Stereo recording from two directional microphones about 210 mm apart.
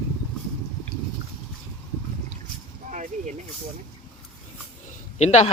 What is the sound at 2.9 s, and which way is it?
Vehicle, 35° right (ahead or behind).